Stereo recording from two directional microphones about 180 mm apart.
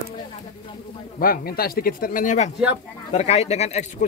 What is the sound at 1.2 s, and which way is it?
Speech, 55° left (ahead or behind).